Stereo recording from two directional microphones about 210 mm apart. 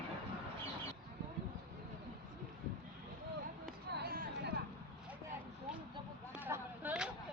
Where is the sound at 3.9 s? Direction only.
45° right (ahead or behind).